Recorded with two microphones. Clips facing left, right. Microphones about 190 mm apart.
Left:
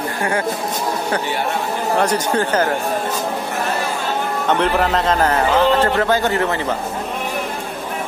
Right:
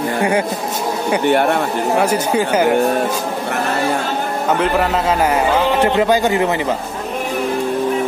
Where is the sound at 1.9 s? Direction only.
10° right (ahead or behind).